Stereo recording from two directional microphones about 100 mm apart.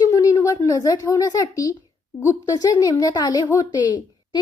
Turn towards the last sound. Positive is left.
turn(degrees=45)  # may be behind; listen again after turning